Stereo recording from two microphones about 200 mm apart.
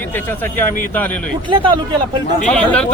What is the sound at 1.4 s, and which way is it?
Speech, 25° right (ahead or behind).